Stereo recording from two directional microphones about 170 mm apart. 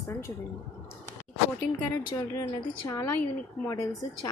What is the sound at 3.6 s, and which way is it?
Speech, 20° left (ahead or behind).